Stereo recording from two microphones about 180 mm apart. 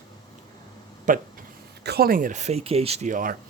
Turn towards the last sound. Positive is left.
turn(degrees=-45)  # may be behind; listen again after turning